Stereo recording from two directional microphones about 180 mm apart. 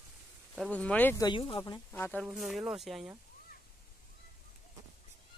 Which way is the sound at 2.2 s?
Centre (ahead or behind).